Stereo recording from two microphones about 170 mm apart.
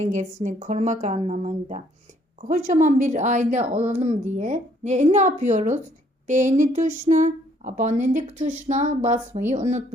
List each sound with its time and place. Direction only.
0.0 s speech: 45° right (ahead or behind)